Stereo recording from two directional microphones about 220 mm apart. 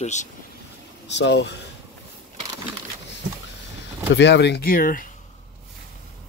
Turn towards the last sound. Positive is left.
turn(degrees=40)  # may be behind; listen again after turning